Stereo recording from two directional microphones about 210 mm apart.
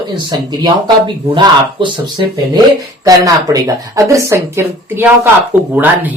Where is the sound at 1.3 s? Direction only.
25° right (ahead or behind).